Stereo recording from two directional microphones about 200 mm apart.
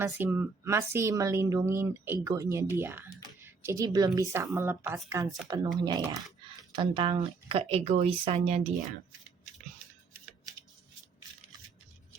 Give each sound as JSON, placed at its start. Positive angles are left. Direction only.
{"t": 0.0, "sound": "speech", "side_deg": -10}